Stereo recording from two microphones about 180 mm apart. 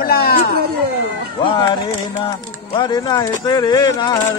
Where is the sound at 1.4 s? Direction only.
30° left (ahead or behind).